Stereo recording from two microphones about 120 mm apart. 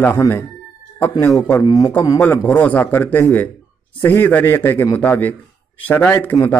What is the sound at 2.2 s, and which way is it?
A man's voice, 10° left (ahead or behind).